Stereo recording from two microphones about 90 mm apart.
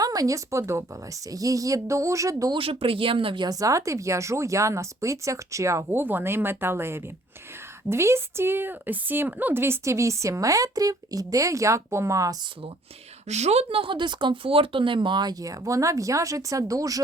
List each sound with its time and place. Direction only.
0.0 s speech: 45° right (ahead or behind)
2.6 s speech: 85° right; by 3.5 s 70° right (ahead or behind)
3.5 s speech: 40° right (ahead or behind)
6.0 s speech: 25° right (ahead or behind)
13.7 s speech: 80° right; by 17.0 s 40° right (ahead or behind)